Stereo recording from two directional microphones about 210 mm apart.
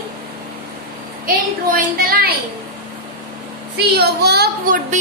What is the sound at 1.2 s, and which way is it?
A woman's voice, 45° right (ahead or behind).